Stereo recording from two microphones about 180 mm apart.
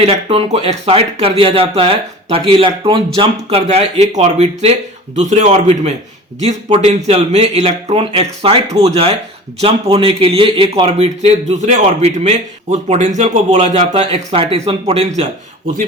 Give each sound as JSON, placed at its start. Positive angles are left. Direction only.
{"t": 0.0, "sound": "speech", "side_deg": -35}